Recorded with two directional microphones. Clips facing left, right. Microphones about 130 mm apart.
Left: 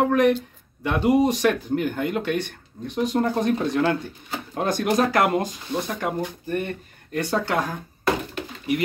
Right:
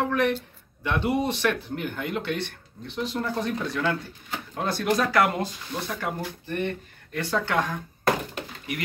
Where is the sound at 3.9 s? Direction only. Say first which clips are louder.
Left 4 dB; 20° left (ahead or behind).